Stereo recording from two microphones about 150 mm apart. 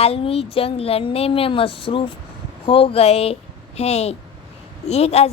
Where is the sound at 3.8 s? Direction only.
45° left (ahead or behind).